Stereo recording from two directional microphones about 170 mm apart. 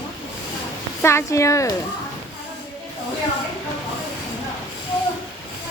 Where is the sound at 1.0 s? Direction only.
15° left (ahead or behind).